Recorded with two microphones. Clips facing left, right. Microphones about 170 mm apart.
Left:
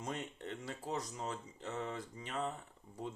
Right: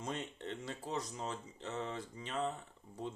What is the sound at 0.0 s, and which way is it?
Speech, 25° right (ahead or behind).